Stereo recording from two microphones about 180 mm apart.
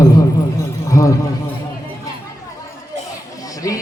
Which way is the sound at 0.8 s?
15° left (ahead or behind).